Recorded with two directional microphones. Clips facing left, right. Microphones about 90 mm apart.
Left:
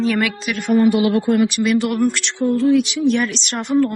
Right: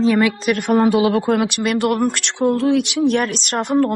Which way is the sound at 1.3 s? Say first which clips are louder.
Left 2 dB; 65° right (ahead or behind).